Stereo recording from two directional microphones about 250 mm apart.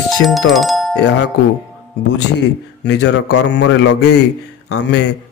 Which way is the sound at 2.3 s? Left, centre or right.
Left.